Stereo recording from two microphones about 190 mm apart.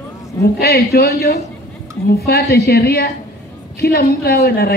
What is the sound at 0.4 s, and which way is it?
A woman's voice, 55° left (ahead or behind).